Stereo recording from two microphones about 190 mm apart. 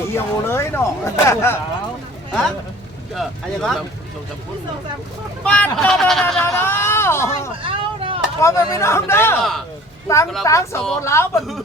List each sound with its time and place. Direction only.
0.1 s speech: 15° left (ahead or behind)
3.2 s speech: centre (ahead or behind)
5.5 s speech: 5° left (ahead or behind)
7.6 s a sound: 30° right (ahead or behind)
8.4 s speech: 15° left (ahead or behind)
9.4 s speech: centre (ahead or behind)
10.1 s speech: 15° left (ahead or behind)